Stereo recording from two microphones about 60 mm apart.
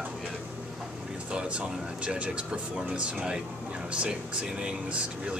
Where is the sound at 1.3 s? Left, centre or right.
Centre.